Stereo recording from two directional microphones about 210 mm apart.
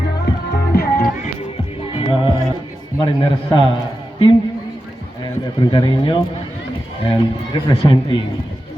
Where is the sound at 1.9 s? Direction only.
25° left (ahead or behind).